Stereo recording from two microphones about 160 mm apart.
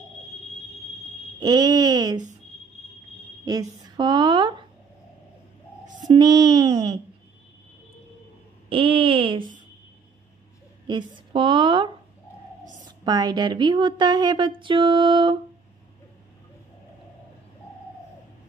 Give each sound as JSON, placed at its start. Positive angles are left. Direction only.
{"t": 1.4, "sound": "speech", "side_deg": -25}
{"t": 3.4, "sound": "a woman's voice", "side_deg": -25}
{"t": 6.0, "sound": "a woman's voice", "side_deg": -25}
{"t": 8.6, "sound": "a sound", "side_deg": -35}
{"t": 10.9, "sound": "a woman's voice", "side_deg": -25}